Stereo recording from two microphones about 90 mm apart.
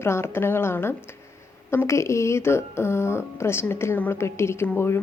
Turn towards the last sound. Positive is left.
turn(degrees=25)  # may be behind; listen again after turning